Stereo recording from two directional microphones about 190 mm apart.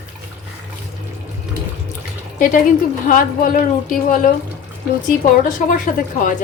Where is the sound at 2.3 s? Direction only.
45° left (ahead or behind).